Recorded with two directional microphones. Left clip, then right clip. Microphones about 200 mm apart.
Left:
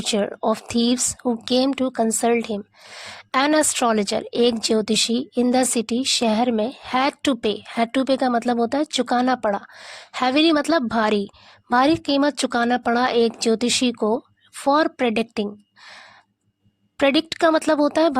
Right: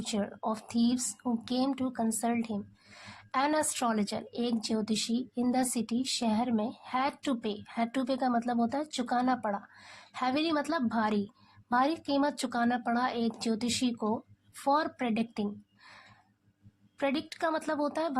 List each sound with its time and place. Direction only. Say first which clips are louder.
0.0 s speech: left 13 dB; 45° left (ahead or behind)